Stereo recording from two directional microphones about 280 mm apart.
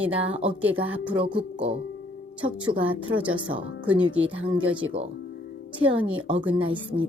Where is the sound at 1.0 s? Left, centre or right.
Centre.